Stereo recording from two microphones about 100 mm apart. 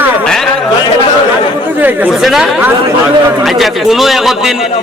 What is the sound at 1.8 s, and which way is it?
Speech, 15° right (ahead or behind).